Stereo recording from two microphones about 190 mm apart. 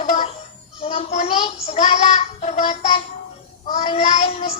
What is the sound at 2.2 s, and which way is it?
Music, 35° left (ahead or behind).